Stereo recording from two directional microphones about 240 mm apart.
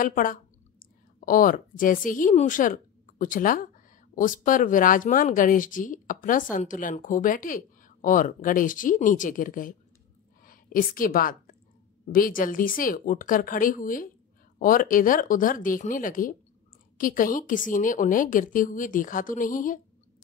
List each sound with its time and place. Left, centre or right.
0.0 s a woman's voice: left